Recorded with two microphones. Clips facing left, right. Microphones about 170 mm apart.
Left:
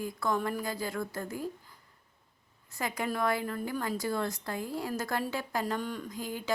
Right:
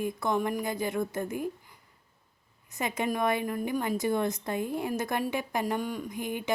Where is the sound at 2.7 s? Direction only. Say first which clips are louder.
Right 3 dB; 20° right (ahead or behind).